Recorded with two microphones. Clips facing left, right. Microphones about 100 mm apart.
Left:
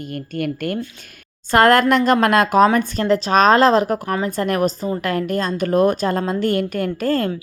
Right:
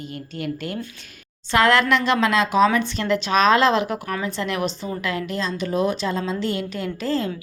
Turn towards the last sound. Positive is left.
turn(degrees=50)  # may be behind; listen again after turning